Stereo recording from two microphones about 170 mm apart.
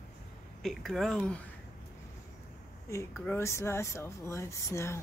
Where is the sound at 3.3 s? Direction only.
15° left (ahead or behind).